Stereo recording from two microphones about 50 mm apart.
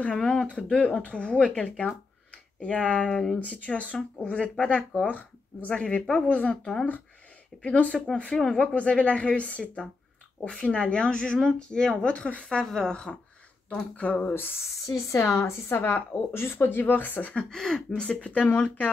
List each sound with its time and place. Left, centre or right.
0.0 s speech: centre
3.3 s speech: left
8.4 s speech: centre
8.7 s speech: left
13.9 s speech: left
14.9 s a woman's voice: left
17.3 s speech: centre
18.5 s speech: left